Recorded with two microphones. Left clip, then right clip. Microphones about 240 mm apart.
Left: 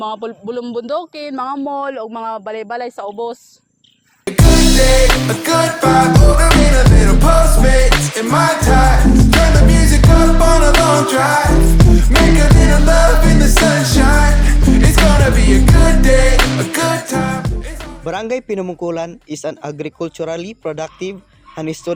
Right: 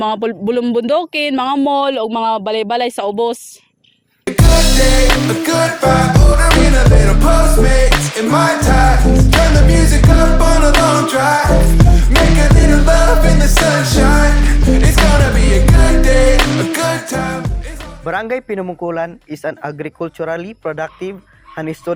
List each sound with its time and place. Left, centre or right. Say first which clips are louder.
0.0 s a man's voice: right 6 dB; right
4.3 s music: left 1 dB; centre
18.0 s speech: right 2 dB; left